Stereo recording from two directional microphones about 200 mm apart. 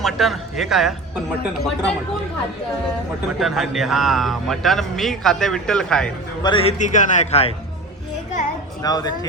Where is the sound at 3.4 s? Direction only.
Centre (ahead or behind).